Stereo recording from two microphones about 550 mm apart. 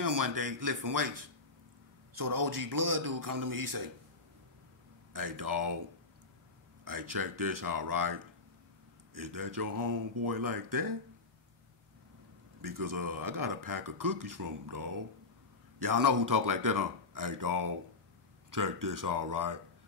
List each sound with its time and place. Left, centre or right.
0.0 s speech: right
5.1 s speech: right
6.8 s speech: right
12.6 s speech: right